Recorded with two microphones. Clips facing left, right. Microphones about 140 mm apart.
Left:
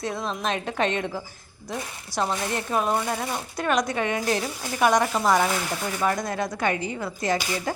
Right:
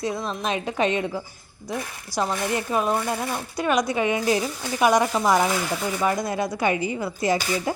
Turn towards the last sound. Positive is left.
turn(degrees=-10)  # may be behind; listen again after turning